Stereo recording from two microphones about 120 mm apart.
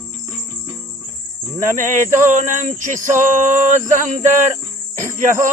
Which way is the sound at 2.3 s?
90° right.